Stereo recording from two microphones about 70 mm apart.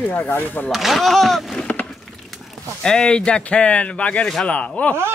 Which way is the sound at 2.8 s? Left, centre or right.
Centre.